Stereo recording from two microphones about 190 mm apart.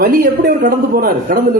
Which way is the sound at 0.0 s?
50° right (ahead or behind).